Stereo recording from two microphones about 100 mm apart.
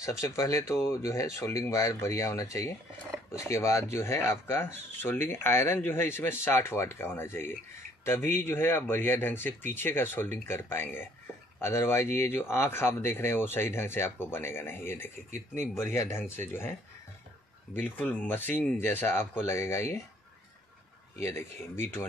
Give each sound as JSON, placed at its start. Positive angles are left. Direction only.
{"t": 0.0, "sound": "speech", "side_deg": 30}
{"t": 17.7, "sound": "speech", "side_deg": 20}
{"t": 21.2, "sound": "speech", "side_deg": 30}